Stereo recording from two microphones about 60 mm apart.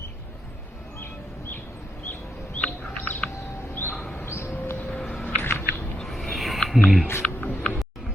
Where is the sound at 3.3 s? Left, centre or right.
Left.